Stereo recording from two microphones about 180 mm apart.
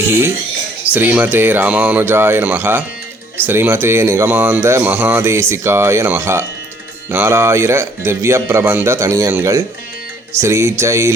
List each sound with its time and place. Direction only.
0.9 s speech: 10° right (ahead or behind)